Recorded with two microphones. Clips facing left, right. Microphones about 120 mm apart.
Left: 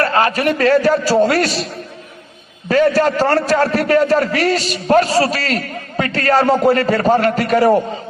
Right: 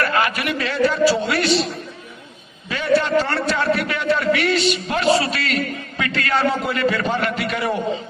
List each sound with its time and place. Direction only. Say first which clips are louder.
0.0 s a man's voice: left 5 dB; 35° left (ahead or behind)
2.6 s a man's voice: left 6 dB; 45° left (ahead or behind)